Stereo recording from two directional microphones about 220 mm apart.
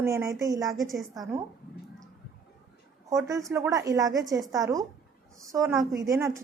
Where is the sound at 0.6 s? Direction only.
Centre (ahead or behind).